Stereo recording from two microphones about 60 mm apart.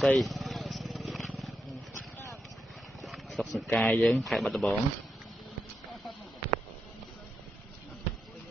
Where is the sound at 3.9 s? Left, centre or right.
Left.